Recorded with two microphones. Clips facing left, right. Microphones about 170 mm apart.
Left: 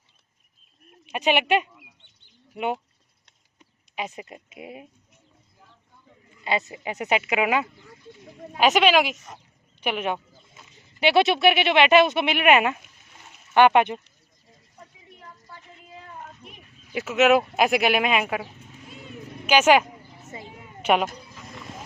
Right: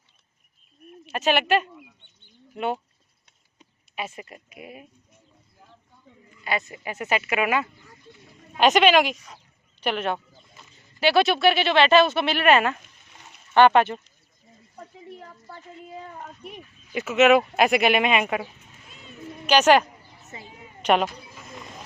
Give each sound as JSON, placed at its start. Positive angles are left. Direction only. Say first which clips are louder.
{"t": 1.0, "sound": "speech", "louder": "even", "side_deg": 15}
{"t": 3.9, "sound": "speech", "louder": "left 1 dB", "side_deg": 15}
{"t": 6.4, "sound": "speech", "louder": "left 2 dB", "side_deg": 20}
{"t": 8.5, "sound": "speech", "louder": "right 1 dB", "side_deg": 5}
{"t": 9.1, "sound": "speech", "louder": "left 3 dB", "side_deg": 50}
{"t": 9.8, "sound": "speech", "louder": "right 1 dB", "side_deg": 10}
{"t": 11.0, "sound": "speech", "louder": "even", "side_deg": 20}
{"t": 16.9, "sound": "speech", "louder": "right 1 dB", "side_deg": 0}
{"t": 19.5, "sound": "speech", "louder": "even", "side_deg": 10}